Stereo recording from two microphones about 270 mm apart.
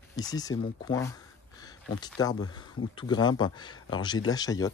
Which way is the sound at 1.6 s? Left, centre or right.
Centre.